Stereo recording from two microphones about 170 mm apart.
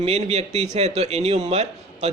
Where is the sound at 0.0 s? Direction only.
40° right (ahead or behind).